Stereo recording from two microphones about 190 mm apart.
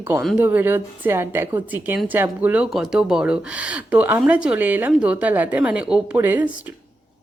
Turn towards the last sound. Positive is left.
turn(degrees=-10)  # may be behind; listen again after turning